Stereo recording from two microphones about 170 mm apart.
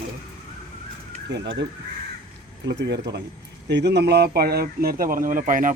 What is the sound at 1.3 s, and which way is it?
Speech, 90° right.